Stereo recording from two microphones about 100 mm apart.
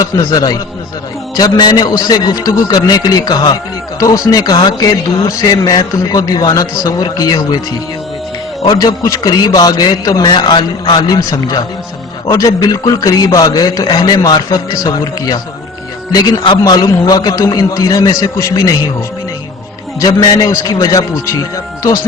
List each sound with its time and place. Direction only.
0.0 s speech: 35° left (ahead or behind)
8.6 s a man's voice: 40° left (ahead or behind)
20.0 s speech: 35° left (ahead or behind)